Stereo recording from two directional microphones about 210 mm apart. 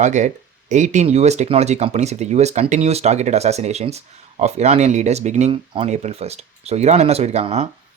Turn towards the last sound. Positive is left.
turn(degrees=-30)  # may be behind; listen again after turning